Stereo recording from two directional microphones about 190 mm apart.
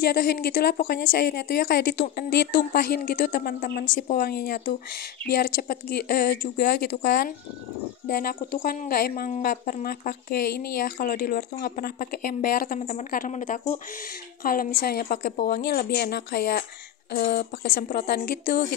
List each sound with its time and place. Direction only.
0.0 s a woman's voice: 55° left (ahead or behind)